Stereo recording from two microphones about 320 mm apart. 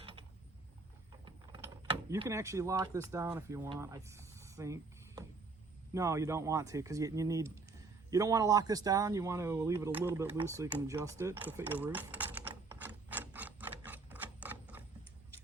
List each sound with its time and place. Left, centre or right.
0.0 s mechanisms: centre
1.2 s speech: centre